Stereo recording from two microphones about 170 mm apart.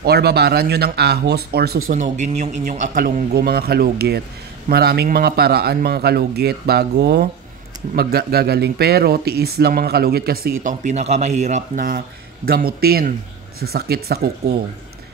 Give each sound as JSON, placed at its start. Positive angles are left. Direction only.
{"t": 0.0, "sound": "a man's voice", "side_deg": -70}
{"t": 2.0, "sound": "a man's voice", "side_deg": -45}
{"t": 12.4, "sound": "speech", "side_deg": -65}